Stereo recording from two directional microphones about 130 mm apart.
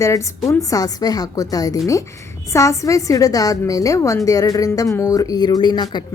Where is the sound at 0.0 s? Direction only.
25° left (ahead or behind).